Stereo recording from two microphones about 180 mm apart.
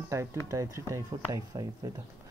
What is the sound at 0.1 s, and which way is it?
Speech, 15° right (ahead or behind).